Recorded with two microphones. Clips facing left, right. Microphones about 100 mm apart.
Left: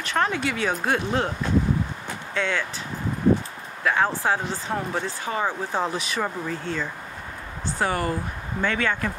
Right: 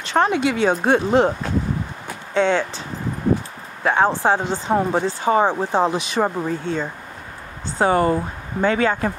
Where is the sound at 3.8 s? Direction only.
30° right (ahead or behind).